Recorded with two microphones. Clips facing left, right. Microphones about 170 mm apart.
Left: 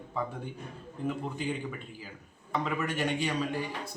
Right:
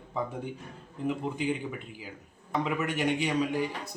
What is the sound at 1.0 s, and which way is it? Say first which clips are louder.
A man's voice: right 3 dB; 15° right (ahead or behind).